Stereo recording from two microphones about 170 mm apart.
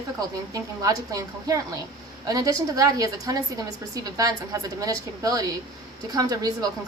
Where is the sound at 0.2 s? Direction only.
20° right (ahead or behind).